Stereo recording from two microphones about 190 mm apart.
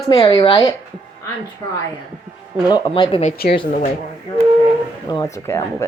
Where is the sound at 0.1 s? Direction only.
25° left (ahead or behind).